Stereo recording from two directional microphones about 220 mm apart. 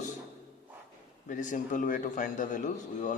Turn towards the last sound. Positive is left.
turn(degrees=35)  # may be behind; listen again after turning